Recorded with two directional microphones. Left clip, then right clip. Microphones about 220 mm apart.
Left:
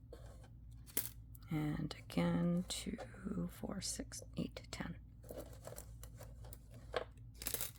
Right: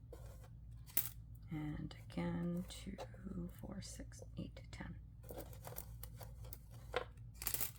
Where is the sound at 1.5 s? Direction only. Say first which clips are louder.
Left 6 dB; 50° left (ahead or behind).